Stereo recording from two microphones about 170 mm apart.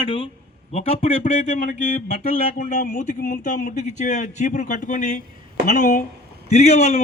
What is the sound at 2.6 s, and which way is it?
A man's voice, 50° left (ahead or behind).